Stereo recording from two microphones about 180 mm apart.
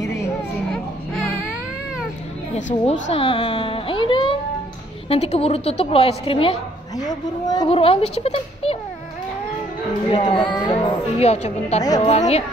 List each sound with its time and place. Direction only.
2.5 s a woman's voice: 35° left (ahead or behind)
10.0 s a woman's voice: 25° left (ahead or behind)